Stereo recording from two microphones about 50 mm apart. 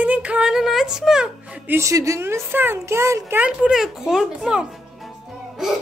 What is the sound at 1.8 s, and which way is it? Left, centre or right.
Speech, right.